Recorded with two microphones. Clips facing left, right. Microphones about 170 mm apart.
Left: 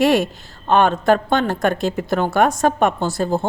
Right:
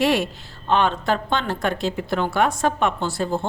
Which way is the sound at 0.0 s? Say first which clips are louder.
Left 4 dB; 45° left (ahead or behind).